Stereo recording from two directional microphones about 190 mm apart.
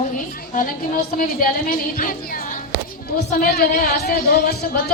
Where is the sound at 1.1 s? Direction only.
50° left (ahead or behind).